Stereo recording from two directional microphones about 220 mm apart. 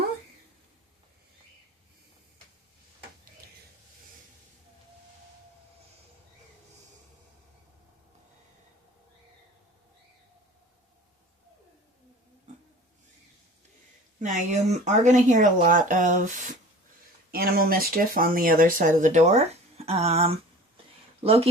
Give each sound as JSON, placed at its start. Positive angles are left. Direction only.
{"t": 14.2, "sound": "speech", "side_deg": -35}